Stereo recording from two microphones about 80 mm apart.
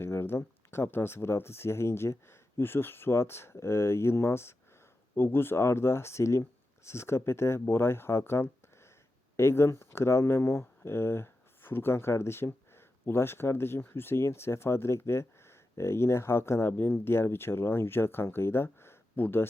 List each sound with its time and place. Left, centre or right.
0.0 s speech: left